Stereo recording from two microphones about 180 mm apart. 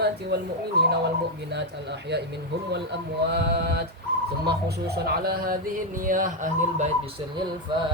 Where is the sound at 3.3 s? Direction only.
65° right (ahead or behind); by 6.8 s 45° right (ahead or behind).